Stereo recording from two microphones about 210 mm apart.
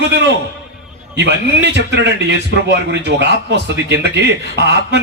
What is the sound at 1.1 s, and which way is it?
A man's voice, 55° right (ahead or behind).